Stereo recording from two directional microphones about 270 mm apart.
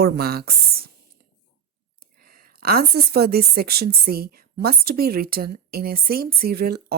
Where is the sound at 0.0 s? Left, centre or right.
Right.